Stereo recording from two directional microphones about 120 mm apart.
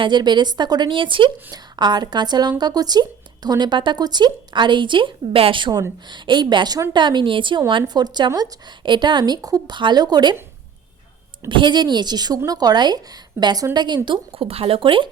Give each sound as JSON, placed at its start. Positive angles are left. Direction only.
{"t": 0.0, "sound": "speech", "side_deg": -40}
{"t": 11.4, "sound": "speech", "side_deg": -40}